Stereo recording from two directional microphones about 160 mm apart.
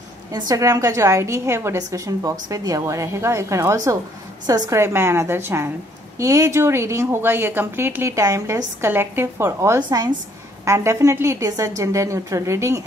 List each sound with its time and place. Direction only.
0.3 s a woman's voice: 25° right (ahead or behind)